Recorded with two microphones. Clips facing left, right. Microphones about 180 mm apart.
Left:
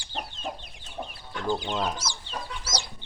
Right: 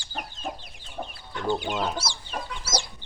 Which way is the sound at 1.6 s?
5° right (ahead or behind).